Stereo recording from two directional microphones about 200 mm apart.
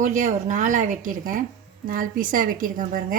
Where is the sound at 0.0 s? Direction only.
40° right (ahead or behind).